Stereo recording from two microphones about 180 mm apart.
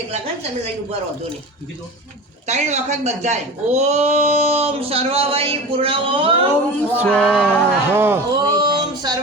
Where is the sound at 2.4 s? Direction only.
40° right (ahead or behind).